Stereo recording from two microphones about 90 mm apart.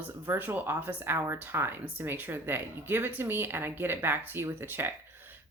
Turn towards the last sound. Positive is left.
turn(degrees=-25)  # may be behind; listen again after turning